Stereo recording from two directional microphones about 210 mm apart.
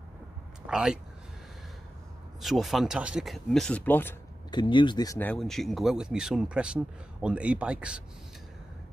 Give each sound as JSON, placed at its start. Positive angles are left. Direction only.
{"t": 0.7, "sound": "speech", "side_deg": -5}
{"t": 2.4, "sound": "speech", "side_deg": 0}
{"t": 4.5, "sound": "speech", "side_deg": 20}